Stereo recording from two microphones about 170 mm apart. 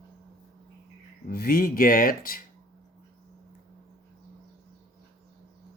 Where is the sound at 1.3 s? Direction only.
60° left (ahead or behind).